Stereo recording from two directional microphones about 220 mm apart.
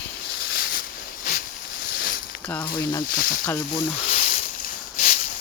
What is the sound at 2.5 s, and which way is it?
Speech, 15° left (ahead or behind).